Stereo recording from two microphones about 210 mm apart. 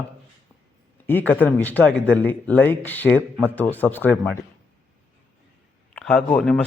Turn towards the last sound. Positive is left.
turn(degrees=5)  # may be behind; listen again after turning